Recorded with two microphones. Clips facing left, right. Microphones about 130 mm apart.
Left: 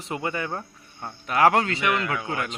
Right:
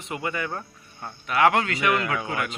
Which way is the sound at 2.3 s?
30° left (ahead or behind).